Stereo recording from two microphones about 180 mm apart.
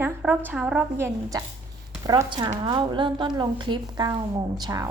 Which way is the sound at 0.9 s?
15° right (ahead or behind).